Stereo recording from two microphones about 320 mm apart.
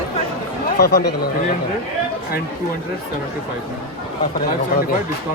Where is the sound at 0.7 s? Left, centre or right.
Left.